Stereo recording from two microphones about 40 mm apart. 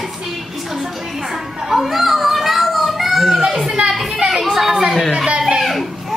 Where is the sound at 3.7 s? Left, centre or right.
Centre.